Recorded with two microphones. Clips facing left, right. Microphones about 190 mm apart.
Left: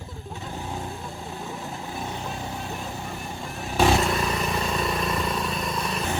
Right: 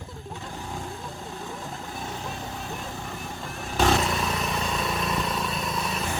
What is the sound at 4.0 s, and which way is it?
Vehicle, centre (ahead or behind).